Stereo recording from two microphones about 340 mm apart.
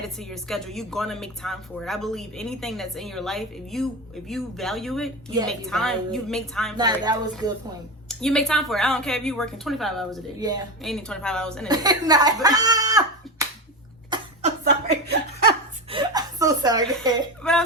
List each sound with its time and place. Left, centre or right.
0.2 s speech: centre
6.7 s speech: centre
8.0 s speech: centre
11.7 s speech: centre
14.1 s a sound: centre
15.9 s a sound: centre
17.4 s speech: centre